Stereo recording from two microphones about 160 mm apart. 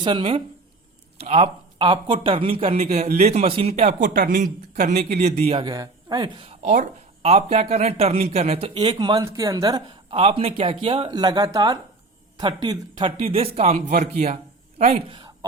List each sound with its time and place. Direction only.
0.0 s speech: 35° right (ahead or behind)
10.2 s speech: 40° right (ahead or behind)
15.1 s a sound: 30° right (ahead or behind)